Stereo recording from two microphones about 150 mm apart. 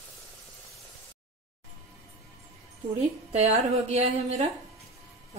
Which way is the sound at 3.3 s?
45° right (ahead or behind).